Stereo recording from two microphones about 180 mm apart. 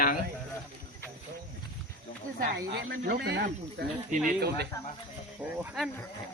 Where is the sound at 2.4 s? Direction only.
60° right (ahead or behind).